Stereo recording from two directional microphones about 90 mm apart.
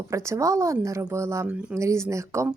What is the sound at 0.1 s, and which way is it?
Speech, 35° right (ahead or behind).